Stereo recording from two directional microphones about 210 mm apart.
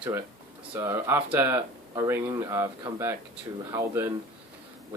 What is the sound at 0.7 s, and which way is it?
Speech, 10° right (ahead or behind).